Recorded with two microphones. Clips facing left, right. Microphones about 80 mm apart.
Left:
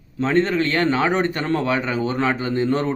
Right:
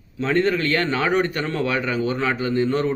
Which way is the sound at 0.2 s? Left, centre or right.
Left.